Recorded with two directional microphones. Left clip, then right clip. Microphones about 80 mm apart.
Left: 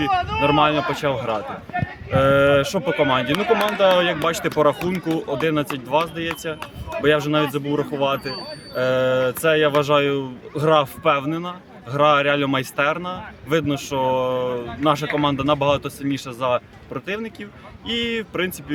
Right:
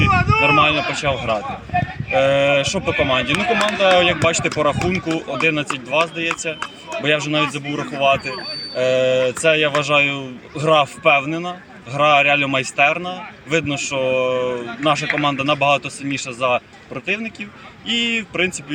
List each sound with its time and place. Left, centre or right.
0.0 s speech: left